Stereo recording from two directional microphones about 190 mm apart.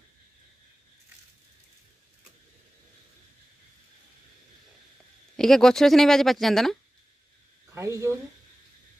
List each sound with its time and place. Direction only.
5.3 s speech: 5° left (ahead or behind)
7.7 s speech: 15° right (ahead or behind)